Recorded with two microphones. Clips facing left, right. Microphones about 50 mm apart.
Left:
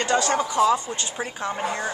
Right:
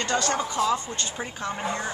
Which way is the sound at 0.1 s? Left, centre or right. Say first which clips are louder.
Left 4 dB; centre.